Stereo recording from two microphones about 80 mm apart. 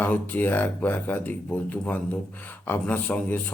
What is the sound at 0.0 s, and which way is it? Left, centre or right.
Speech, left.